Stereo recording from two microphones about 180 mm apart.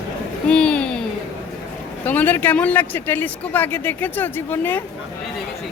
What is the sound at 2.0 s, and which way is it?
Speech, 10° left (ahead or behind).